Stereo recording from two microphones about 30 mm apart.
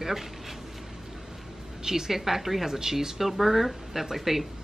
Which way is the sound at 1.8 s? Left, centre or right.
Centre.